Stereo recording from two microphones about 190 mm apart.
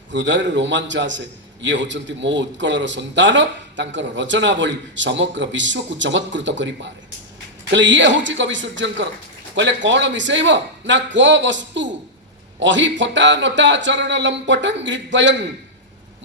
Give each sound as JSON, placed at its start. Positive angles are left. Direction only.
{"t": 0.1, "sound": "a man's voice", "side_deg": -75}